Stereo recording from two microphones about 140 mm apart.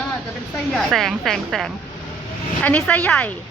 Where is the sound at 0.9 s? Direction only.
Centre (ahead or behind).